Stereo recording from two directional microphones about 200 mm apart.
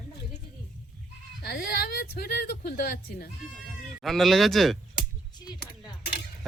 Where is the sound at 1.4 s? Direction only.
50° left (ahead or behind).